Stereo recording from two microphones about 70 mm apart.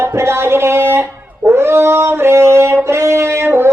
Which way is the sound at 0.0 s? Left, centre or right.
Right.